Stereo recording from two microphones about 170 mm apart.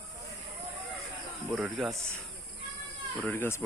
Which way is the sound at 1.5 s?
Centre (ahead or behind).